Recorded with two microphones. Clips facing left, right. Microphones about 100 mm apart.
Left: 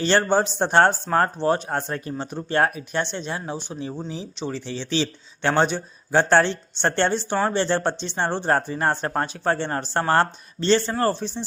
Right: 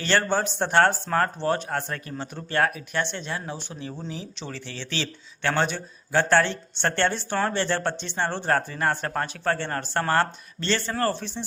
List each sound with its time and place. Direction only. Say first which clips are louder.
0.0 s speech: left 4 dB; 20° left (ahead or behind)